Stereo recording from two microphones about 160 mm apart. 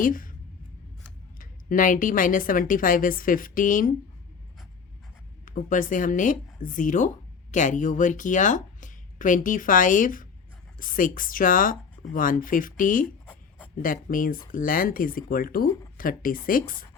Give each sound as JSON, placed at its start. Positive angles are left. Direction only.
{"t": 0.0, "sound": "speech", "side_deg": 60}
{"t": 1.4, "sound": "speech", "side_deg": 55}
{"t": 5.5, "sound": "speech", "side_deg": 55}